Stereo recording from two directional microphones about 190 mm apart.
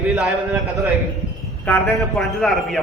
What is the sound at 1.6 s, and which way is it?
A man's voice, 5° left (ahead or behind).